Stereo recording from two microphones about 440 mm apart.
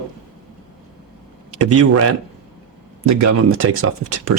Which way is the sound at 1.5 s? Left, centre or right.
Right.